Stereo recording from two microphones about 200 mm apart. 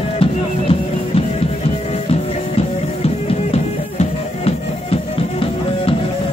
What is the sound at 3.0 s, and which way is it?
Music, 30° left (ahead or behind).